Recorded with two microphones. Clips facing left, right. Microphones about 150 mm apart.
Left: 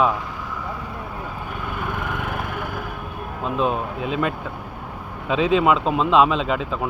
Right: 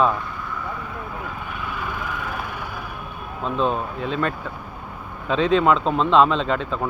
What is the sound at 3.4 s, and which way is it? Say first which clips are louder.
Speech: even; 10° left (ahead or behind).